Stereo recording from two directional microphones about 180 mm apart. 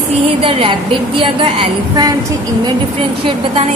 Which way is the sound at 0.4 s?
30° right (ahead or behind).